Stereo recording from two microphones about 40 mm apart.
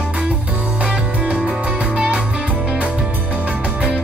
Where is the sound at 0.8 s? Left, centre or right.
Right.